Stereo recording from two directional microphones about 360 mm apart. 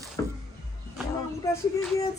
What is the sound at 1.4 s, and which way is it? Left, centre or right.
Speech, centre.